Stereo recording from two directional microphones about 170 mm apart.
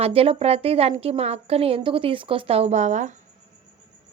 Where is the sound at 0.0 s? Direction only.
35° right (ahead or behind).